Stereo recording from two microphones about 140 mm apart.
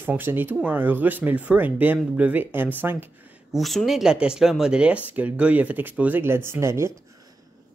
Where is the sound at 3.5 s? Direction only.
Centre (ahead or behind); by 6.9 s 20° right (ahead or behind).